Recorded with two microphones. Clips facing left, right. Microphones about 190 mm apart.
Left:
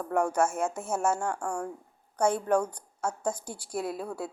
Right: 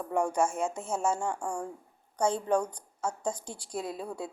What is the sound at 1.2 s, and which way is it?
Speech, 15° right (ahead or behind).